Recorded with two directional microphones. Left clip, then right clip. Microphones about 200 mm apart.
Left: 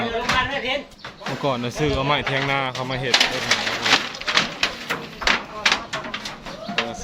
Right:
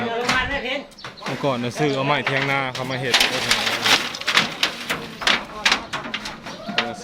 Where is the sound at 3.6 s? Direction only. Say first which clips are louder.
Right 1 dB; 50° right (ahead or behind).